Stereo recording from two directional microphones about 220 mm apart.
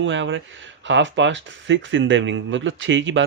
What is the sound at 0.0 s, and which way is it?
Speech, 55° right (ahead or behind).